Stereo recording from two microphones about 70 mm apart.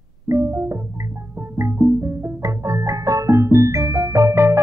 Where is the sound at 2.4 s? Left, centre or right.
Right.